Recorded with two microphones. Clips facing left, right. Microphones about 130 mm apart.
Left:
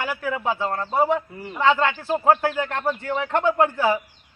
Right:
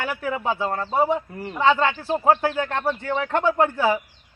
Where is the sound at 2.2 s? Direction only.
30° right (ahead or behind).